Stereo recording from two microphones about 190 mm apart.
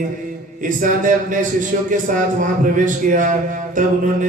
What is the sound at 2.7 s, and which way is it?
Speech, 45° right (ahead or behind).